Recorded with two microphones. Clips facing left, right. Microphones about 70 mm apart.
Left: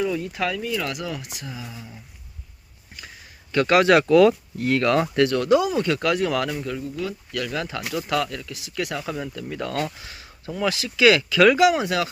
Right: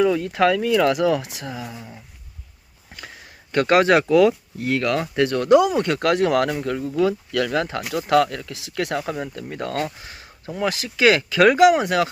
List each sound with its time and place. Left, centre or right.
0.0 s speech: right
1.7 s speech: right
2.9 s a sound: right
3.5 s speech: right
4.1 s speech: centre
5.1 s speech: right
5.5 s speech: right
5.9 s speech: right
6.1 s speech: right
7.6 s speech: right
9.4 s speech: right